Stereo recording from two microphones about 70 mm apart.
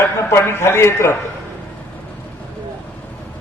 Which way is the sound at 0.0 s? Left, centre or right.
Left.